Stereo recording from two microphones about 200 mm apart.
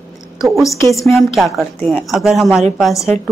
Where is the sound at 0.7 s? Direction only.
15° left (ahead or behind).